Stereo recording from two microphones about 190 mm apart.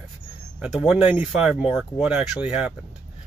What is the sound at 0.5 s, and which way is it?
Speech, 5° right (ahead or behind).